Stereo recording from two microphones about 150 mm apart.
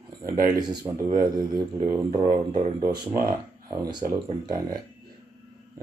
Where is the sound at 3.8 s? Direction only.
30° right (ahead or behind).